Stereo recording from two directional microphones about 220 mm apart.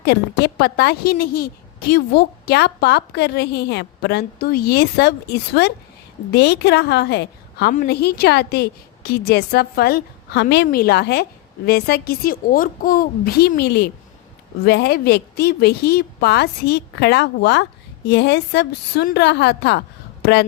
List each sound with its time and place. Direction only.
0.0 s a woman's voice: 45° left (ahead or behind)